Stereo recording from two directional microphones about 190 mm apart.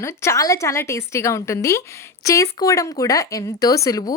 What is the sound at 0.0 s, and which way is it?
Speech, 15° left (ahead or behind).